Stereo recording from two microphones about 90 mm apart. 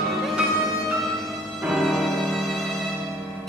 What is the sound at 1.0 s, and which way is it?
Music, centre (ahead or behind).